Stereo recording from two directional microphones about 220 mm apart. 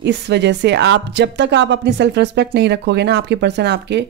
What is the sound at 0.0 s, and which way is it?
Speech, 50° right (ahead or behind).